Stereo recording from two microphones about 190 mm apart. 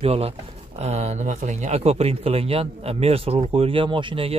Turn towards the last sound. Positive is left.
turn(degrees=-25)  # may be behind; listen again after turning